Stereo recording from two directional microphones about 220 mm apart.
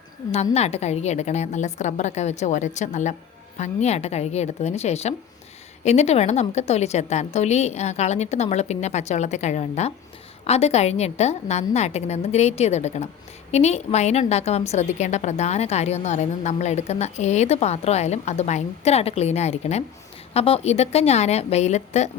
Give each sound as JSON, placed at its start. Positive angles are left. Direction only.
{"t": 0.5, "sound": "a woman's voice", "side_deg": 30}